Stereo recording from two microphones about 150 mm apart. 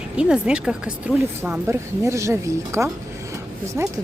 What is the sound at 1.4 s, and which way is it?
Speech, 15° right (ahead or behind).